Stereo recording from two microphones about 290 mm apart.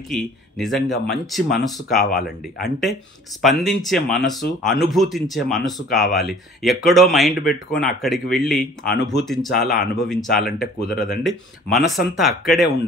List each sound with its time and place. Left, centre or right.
0.1 s speech: centre
0.8 s speech: left
1.6 s speech: centre
8.9 s speech: left
9.2 s speech: centre